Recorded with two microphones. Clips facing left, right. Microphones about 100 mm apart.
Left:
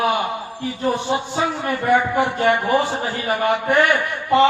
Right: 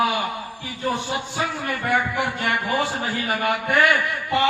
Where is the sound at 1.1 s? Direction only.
25° left (ahead or behind).